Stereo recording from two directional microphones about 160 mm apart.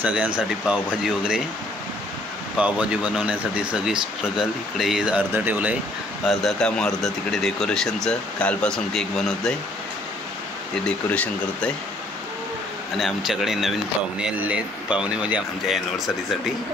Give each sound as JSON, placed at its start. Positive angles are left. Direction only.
{"t": 0.0, "sound": "speech", "side_deg": -10}
{"t": 2.5, "sound": "speech", "side_deg": -5}
{"t": 6.2, "sound": "speech", "side_deg": 5}
{"t": 10.9, "sound": "speech", "side_deg": 10}
{"t": 12.9, "sound": "speech", "side_deg": 0}